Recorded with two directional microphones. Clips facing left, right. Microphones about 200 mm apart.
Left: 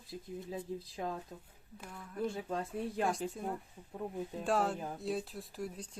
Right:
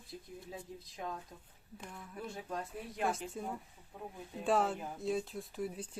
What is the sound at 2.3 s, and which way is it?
Speech, 25° left (ahead or behind).